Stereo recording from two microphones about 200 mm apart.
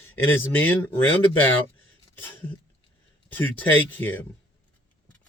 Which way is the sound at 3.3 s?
10° left (ahead or behind).